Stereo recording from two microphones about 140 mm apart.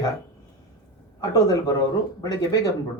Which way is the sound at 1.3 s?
30° left (ahead or behind).